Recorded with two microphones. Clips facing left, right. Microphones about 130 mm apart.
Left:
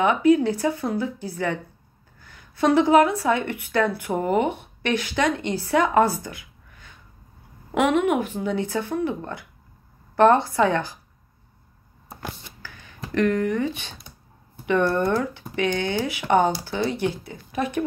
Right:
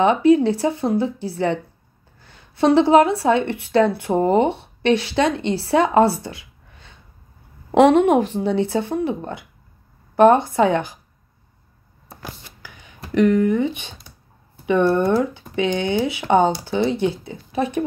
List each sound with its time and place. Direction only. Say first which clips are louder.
0.0 s speech: right 3 dB; 25° right (ahead or behind)
12.6 s a sound: left 2 dB; 15° right (ahead or behind)
14.7 s speech: right 4 dB; 20° right (ahead or behind)